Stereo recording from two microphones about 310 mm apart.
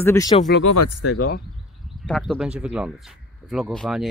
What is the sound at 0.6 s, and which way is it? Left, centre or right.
Speech, left.